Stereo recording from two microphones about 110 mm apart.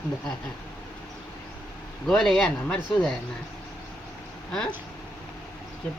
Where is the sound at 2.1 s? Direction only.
5° left (ahead or behind).